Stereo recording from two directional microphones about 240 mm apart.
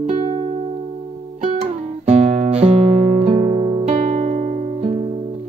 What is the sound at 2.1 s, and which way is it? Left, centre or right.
Guitar, right.